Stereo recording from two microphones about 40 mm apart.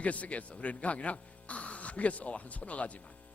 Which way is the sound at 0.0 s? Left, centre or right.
Left.